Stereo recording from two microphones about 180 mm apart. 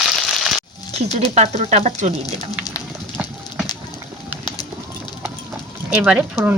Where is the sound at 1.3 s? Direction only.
35° right (ahead or behind).